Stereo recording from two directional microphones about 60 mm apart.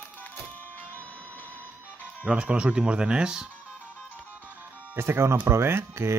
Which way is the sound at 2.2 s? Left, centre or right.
Centre.